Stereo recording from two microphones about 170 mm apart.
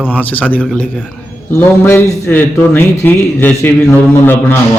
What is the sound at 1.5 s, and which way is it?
A man's voice, 15° left (ahead or behind).